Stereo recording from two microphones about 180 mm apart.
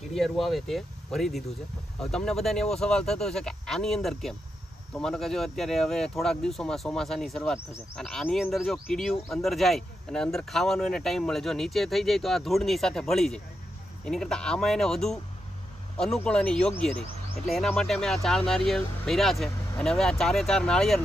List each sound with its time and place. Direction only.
0.1 s speech: centre (ahead or behind)